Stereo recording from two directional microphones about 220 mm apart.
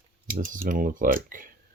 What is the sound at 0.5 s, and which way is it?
Speech, 40° right (ahead or behind).